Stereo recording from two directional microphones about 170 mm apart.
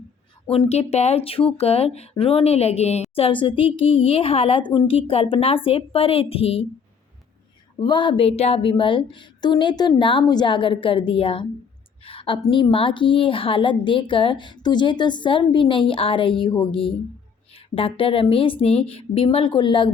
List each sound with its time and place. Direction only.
0.7 s speech: 40° left (ahead or behind)
7.8 s a woman's voice: 30° left (ahead or behind)
12.0 s a sound: 30° left (ahead or behind)
12.4 s a woman's voice: 30° left (ahead or behind)